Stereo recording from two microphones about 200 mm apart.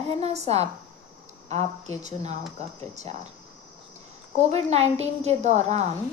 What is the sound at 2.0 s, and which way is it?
Speech, 35° right (ahead or behind).